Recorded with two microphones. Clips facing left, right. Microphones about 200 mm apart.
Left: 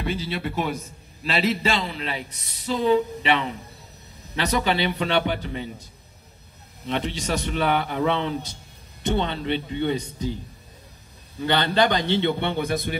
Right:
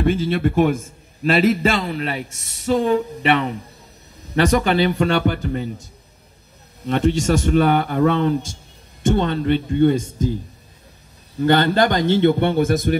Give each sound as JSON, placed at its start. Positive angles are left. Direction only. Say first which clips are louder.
{"t": 0.0, "sound": "a man's voice", "louder": "right 9 dB", "side_deg": -50}
{"t": 6.9, "sound": "a man's voice", "louder": "right 8 dB", "side_deg": -45}